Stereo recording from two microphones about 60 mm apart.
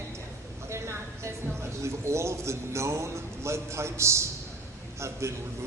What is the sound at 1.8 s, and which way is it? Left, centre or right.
A man's voice, right.